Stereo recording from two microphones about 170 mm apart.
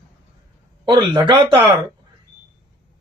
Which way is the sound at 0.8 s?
25° right (ahead or behind).